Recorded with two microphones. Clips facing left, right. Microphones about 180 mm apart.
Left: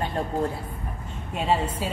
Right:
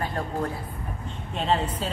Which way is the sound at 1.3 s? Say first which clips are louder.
Left 1 dB; 10° left (ahead or behind).